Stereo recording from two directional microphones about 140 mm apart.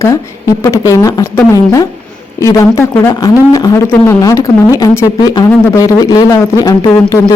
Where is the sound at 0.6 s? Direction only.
20° left (ahead or behind).